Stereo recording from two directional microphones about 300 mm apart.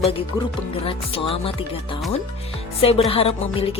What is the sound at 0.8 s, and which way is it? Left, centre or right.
Speech, centre.